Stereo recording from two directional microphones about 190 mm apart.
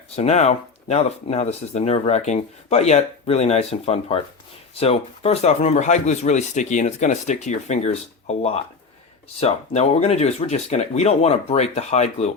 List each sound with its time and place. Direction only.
0.2 s speech: 35° left (ahead or behind)